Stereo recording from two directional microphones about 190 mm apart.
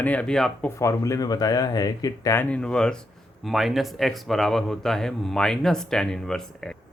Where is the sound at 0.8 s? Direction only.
15° left (ahead or behind).